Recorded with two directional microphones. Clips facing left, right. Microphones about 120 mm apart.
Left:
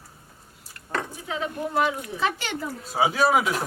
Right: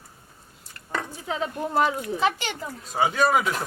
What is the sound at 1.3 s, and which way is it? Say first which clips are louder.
Speech: right 1 dB; 35° right (ahead or behind).